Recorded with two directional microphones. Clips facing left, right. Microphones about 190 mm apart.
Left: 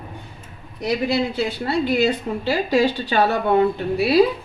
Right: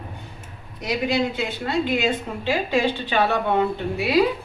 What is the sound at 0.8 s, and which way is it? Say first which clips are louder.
A woman's voice: left 2 dB; 35° left (ahead or behind).